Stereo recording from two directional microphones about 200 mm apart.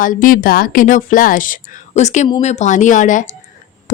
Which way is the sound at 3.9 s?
40° left (ahead or behind).